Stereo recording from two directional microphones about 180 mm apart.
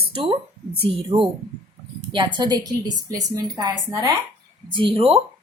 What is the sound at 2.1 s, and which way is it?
A woman's voice, 25° right (ahead or behind).